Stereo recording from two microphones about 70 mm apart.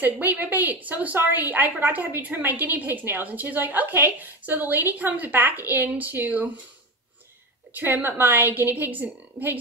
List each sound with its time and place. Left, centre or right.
0.0 s a woman's voice: right
7.7 s a woman's voice: right